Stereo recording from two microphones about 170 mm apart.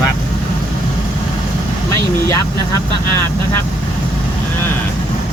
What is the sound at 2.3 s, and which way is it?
Speech, 20° left (ahead or behind).